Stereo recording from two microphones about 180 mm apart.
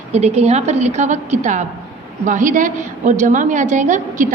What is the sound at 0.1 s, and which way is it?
A woman's voice, 35° right (ahead or behind).